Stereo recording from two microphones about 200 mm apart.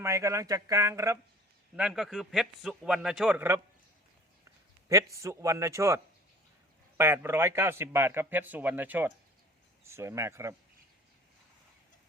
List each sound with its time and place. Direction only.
0.0 s a man's voice: 15° right (ahead or behind)
1.7 s a man's voice: 5° right (ahead or behind)
4.9 s a man's voice: 15° right (ahead or behind)